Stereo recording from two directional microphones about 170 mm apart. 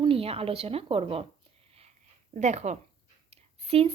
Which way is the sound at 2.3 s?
45° right (ahead or behind).